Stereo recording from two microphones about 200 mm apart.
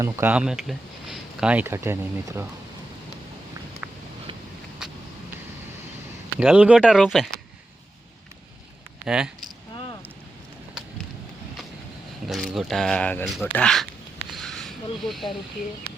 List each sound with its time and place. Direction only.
0.0 s speech: 10° right (ahead or behind)
6.4 s speech: 5° right (ahead or behind)
9.0 s speech: 5° right (ahead or behind)
12.3 s speech: centre (ahead or behind)
14.3 s a sound: centre (ahead or behind)
15.0 s speech: centre (ahead or behind)